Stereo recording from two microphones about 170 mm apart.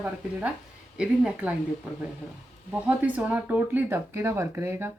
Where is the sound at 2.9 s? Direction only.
10° right (ahead or behind).